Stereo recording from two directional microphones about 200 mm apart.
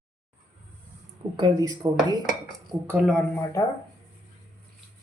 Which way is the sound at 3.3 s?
10° left (ahead or behind).